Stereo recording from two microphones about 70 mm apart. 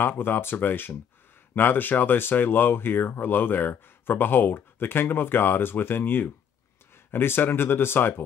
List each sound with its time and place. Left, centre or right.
0.0 s speech: left